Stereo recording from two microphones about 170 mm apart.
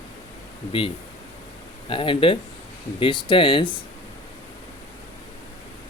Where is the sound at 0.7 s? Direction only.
30° left (ahead or behind).